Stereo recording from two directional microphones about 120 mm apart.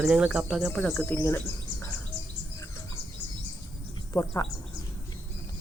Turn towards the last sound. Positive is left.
turn(degrees=20)  # may be behind; listen again after turning